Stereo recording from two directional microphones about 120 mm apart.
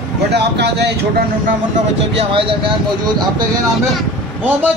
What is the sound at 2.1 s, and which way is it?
Speech, 50° right (ahead or behind).